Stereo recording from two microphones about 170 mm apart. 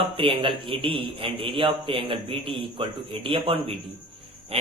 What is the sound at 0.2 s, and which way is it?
A man's voice, 30° right (ahead or behind).